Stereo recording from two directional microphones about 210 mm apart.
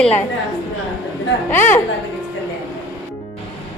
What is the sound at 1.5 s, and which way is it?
Speech, 10° left (ahead or behind).